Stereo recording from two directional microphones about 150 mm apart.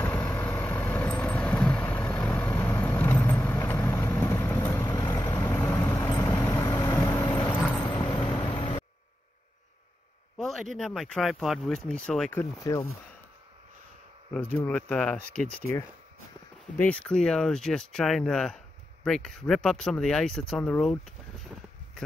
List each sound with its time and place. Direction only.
0.0 s vehicle: 20° left (ahead or behind)
5.5 s vehicle: 10° left (ahead or behind)
6.0 s vehicle: 25° left (ahead or behind)
10.3 s speech: centre (ahead or behind)
12.7 s speech: 20° left (ahead or behind)
14.9 s speech: 5° left (ahead or behind)
16.7 s speech: 10° left (ahead or behind)